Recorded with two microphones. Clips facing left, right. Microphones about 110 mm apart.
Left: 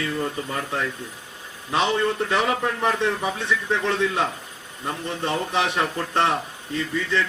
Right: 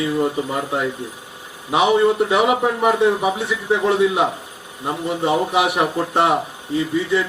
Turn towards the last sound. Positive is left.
turn(degrees=-15)  # may be behind; listen again after turning